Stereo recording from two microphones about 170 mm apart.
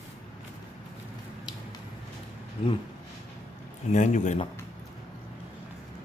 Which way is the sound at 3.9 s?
45° left (ahead or behind).